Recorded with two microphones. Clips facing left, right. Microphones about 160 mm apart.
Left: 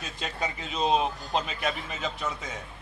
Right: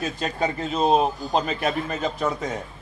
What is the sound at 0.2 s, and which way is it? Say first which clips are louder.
A man's voice: right 5 dB; 45° right (ahead or behind).